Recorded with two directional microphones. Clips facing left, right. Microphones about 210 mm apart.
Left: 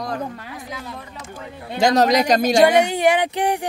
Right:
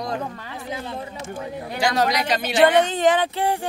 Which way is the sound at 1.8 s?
40° left (ahead or behind).